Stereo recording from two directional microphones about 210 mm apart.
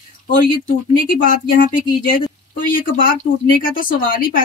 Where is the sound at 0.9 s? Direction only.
40° left (ahead or behind).